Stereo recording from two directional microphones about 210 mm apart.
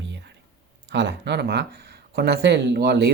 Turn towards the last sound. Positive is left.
turn(degrees=-50)  # may be behind; listen again after turning